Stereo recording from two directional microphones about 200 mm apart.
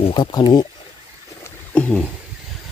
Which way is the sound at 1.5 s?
5° left (ahead or behind).